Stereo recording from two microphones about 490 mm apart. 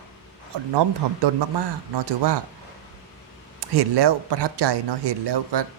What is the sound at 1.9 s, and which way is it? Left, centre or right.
Speech, right.